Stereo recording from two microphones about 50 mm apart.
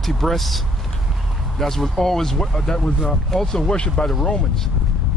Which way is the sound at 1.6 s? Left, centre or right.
Centre.